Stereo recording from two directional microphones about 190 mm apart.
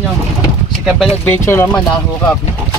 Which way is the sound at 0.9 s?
Centre (ahead or behind).